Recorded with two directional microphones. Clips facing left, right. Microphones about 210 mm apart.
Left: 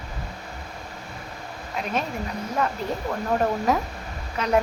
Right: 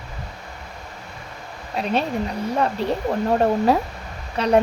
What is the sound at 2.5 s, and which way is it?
Speech, 30° right (ahead or behind).